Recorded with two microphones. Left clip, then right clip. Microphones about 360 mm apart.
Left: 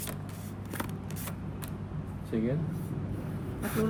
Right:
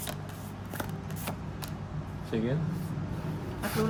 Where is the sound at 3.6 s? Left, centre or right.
Centre.